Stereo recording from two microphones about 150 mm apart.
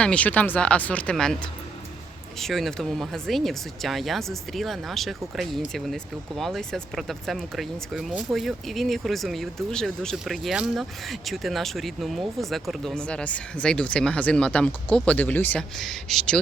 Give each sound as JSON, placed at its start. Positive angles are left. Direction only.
{"t": 0.0, "sound": "speech", "side_deg": 10}
{"t": 2.4, "sound": "speech", "side_deg": 0}